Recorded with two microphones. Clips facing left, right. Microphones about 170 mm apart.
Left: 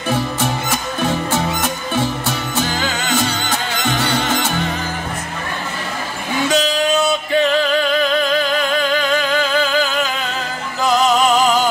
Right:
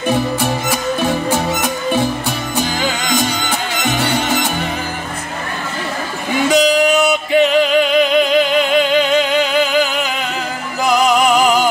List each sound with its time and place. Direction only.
0.1 s music: 10° right (ahead or behind)
6.5 s music: 15° right (ahead or behind)